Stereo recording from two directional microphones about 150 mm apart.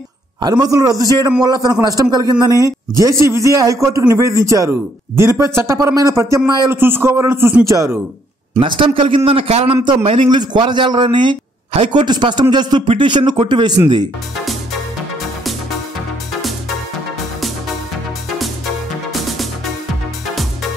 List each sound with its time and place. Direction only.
0.4 s a man's voice: 25° right (ahead or behind)
8.5 s a man's voice: 35° right (ahead or behind)
14.4 s music: centre (ahead or behind)